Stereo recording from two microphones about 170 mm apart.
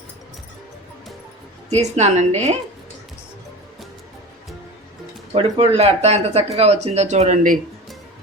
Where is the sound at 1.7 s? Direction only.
40° right (ahead or behind).